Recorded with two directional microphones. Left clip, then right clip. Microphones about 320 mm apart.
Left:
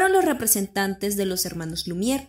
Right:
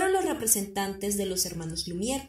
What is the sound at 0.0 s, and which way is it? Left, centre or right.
A woman's voice, left.